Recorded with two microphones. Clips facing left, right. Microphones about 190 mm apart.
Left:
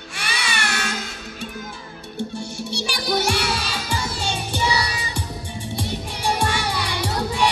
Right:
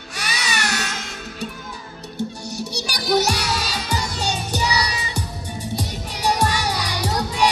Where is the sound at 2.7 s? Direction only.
40° right (ahead or behind).